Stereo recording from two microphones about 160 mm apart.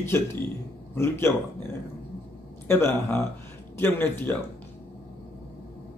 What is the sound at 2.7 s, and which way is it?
Speech, 15° left (ahead or behind).